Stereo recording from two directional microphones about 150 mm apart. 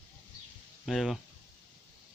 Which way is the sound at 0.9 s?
Centre (ahead or behind).